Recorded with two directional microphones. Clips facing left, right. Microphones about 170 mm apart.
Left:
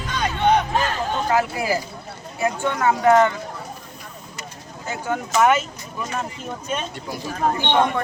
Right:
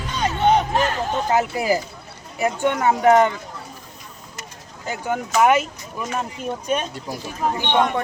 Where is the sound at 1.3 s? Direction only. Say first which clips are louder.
Right 2 dB; 20° right (ahead or behind).